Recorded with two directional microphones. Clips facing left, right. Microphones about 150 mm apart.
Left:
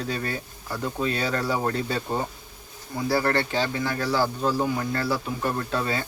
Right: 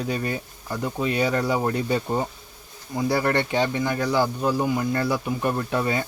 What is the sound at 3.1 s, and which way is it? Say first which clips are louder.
Speech: right 1 dB; 20° right (ahead or behind).